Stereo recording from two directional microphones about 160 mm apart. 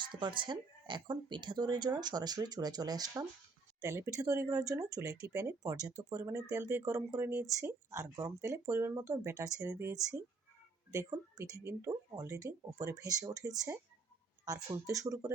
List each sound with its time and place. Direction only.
0.0 s speech: 30° right (ahead or behind)
14.4 s speech: 20° right (ahead or behind)